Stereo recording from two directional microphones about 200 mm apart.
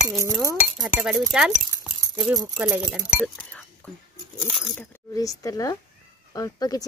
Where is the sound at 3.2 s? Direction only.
5° left (ahead or behind).